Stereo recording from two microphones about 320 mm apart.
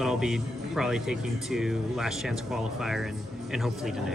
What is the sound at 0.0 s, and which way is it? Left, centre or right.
Speech, centre.